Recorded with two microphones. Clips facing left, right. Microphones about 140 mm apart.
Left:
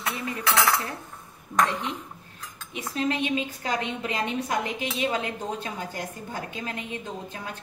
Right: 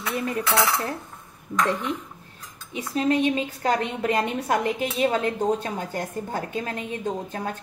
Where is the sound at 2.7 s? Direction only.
35° right (ahead or behind).